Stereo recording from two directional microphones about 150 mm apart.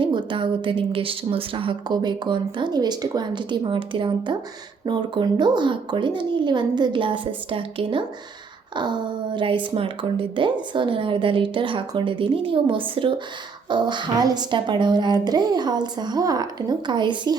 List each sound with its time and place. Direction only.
0.0 s a woman's voice: 30° right (ahead or behind)